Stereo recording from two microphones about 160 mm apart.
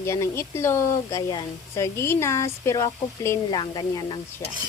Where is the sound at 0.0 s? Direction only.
15° left (ahead or behind).